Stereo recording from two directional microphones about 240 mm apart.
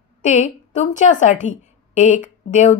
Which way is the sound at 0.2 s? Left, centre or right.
Left.